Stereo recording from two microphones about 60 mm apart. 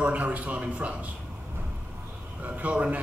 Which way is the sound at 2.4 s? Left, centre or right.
Right.